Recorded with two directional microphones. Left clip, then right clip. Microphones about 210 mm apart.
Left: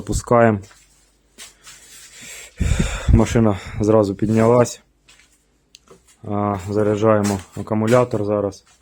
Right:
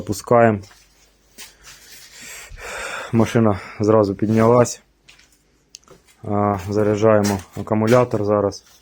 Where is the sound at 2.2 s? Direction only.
15° left (ahead or behind).